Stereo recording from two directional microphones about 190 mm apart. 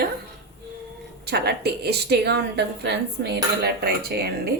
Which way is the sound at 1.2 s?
60° right (ahead or behind).